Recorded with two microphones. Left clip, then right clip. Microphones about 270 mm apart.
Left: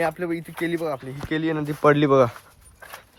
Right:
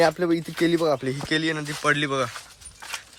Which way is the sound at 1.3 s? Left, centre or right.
Centre.